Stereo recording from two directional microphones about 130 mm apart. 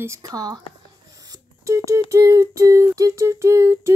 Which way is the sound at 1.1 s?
25° right (ahead or behind).